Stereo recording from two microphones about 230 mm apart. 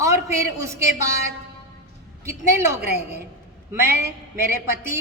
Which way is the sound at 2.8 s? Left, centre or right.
Right.